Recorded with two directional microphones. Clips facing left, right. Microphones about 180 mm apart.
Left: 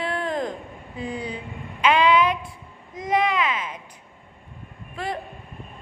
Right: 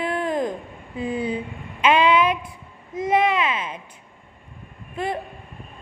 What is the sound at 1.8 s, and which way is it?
Child singing, 20° right (ahead or behind).